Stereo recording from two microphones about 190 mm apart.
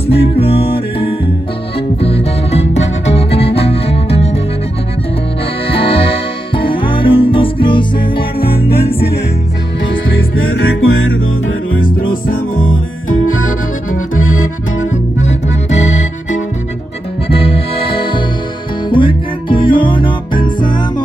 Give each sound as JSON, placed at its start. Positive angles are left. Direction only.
{"t": 0.1, "sound": "music", "side_deg": 30}
{"t": 5.7, "sound": "music", "side_deg": 30}
{"t": 8.4, "sound": "music", "side_deg": 55}
{"t": 9.8, "sound": "music", "side_deg": 85}
{"t": 12.1, "sound": "music", "side_deg": 45}
{"t": 13.1, "sound": "music", "side_deg": 90}
{"t": 14.9, "sound": "accordion", "side_deg": 40}
{"t": 17.3, "sound": "music", "side_deg": 30}